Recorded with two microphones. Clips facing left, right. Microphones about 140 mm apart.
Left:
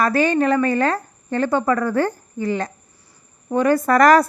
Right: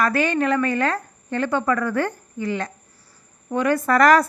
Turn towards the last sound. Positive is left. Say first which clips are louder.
# left 2 dB
turn(degrees=40)  # may be behind; listen again after turning